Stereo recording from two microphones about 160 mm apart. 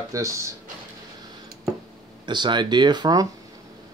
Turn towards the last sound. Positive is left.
turn(degrees=-25)  # may be behind; listen again after turning